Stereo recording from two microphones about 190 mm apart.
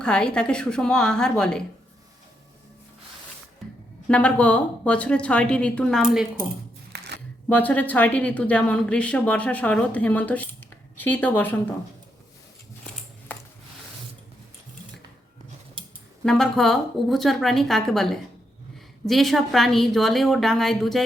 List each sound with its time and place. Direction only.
0.0 s a woman's voice: 5° left (ahead or behind)
4.1 s speech: 5° left (ahead or behind)
6.9 s a sound: 60° right (ahead or behind)
7.4 s speech: 10° left (ahead or behind)
15.8 s scissors: 25° right (ahead or behind)
16.2 s a woman's voice: centre (ahead or behind)